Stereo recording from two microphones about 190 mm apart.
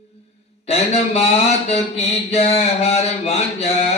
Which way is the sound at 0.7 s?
35° left (ahead or behind).